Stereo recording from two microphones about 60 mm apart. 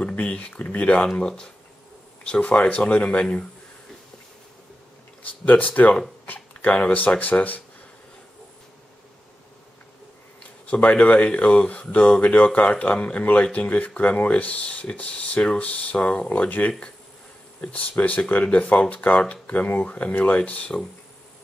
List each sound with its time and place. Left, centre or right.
0.1 s speech: left
5.2 s speech: left
10.7 s speech: left